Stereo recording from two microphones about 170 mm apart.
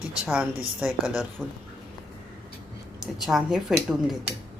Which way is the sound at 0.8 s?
5° right (ahead or behind).